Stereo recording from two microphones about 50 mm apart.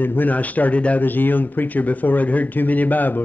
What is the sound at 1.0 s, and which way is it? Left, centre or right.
Speech, left.